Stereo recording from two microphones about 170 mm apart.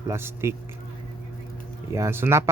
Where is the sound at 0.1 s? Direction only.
15° right (ahead or behind).